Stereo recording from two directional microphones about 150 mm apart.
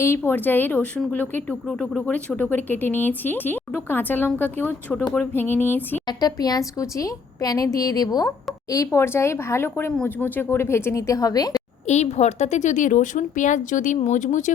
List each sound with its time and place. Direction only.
0.2 s speech: 10° left (ahead or behind)
1.6 s speech: centre (ahead or behind)
6.1 s a woman's voice: 25° left (ahead or behind)
11.9 s a woman's voice: 50° left (ahead or behind)